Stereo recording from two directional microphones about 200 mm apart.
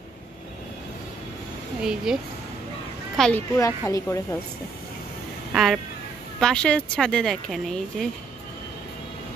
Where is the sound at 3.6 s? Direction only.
15° left (ahead or behind).